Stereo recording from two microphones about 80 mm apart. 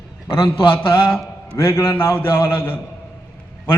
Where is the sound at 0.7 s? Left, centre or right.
Left.